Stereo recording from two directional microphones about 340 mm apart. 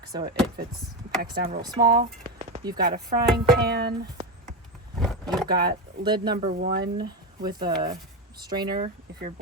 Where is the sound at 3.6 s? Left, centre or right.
Right.